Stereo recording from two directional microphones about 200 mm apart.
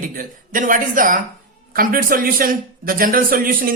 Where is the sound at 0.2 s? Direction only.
45° right (ahead or behind).